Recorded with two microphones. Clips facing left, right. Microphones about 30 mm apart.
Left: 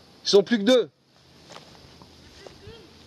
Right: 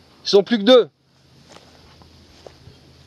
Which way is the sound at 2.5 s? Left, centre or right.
Centre.